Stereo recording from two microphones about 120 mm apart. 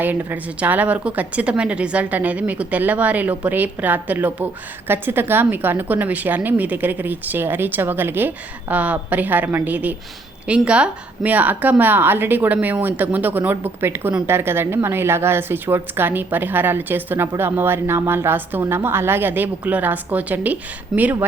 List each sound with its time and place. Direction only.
0.0 s a woman's voice: 15° right (ahead or behind)